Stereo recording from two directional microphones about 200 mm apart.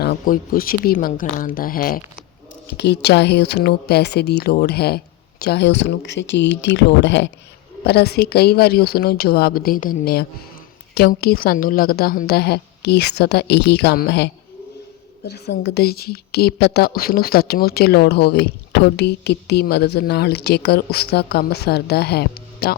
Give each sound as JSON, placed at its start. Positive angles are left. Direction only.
{"t": 0.0, "sound": "a woman's voice", "side_deg": 50}
{"t": 2.7, "sound": "a woman's voice", "side_deg": 55}
{"t": 15.3, "sound": "a woman's voice", "side_deg": 55}